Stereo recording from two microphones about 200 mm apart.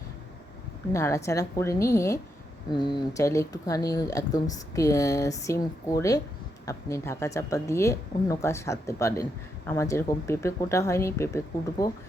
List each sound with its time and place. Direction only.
0.9 s speech: 15° left (ahead or behind)